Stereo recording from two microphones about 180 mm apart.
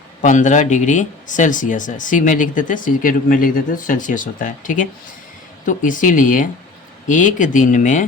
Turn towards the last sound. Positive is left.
turn(degrees=45)  # may be behind; listen again after turning